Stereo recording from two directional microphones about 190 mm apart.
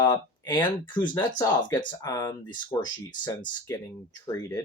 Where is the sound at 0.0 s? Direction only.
20° left (ahead or behind).